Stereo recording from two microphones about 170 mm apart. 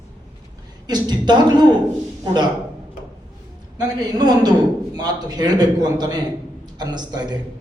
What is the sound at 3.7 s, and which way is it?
A man's voice, 25° right (ahead or behind).